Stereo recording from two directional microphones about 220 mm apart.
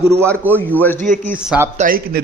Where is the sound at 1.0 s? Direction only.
35° right (ahead or behind).